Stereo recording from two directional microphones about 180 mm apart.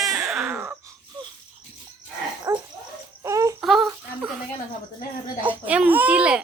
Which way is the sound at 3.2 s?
15° right (ahead or behind).